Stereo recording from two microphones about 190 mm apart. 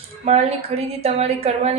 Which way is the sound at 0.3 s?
35° right (ahead or behind).